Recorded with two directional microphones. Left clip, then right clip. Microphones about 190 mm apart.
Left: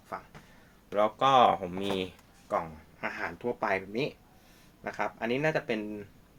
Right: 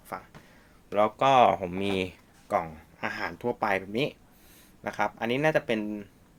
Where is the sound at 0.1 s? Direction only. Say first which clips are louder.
Right 2 dB; 50° right (ahead or behind).